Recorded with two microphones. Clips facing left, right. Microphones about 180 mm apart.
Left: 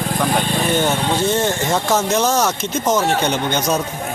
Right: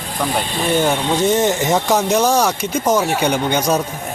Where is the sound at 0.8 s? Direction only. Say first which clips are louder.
Right 2 dB; 15° right (ahead or behind).